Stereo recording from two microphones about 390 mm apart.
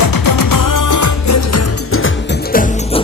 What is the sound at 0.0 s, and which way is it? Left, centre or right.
Music, left.